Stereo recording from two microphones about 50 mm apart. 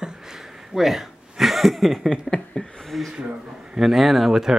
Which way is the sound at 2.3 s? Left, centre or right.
Centre.